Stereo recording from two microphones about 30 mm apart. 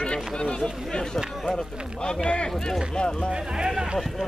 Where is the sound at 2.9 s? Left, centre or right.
Left.